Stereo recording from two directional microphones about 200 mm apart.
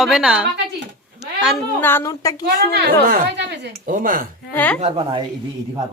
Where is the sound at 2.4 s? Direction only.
55° right (ahead or behind).